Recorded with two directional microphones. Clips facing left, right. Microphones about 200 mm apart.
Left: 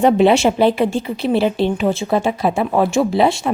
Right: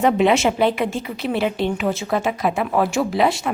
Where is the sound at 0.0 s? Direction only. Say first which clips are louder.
Left 4 dB; 30° left (ahead or behind).